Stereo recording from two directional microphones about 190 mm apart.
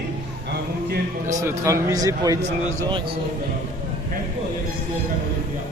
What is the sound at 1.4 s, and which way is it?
A man's voice, 15° right (ahead or behind).